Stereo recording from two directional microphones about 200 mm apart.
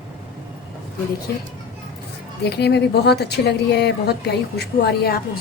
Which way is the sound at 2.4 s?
55° left (ahead or behind).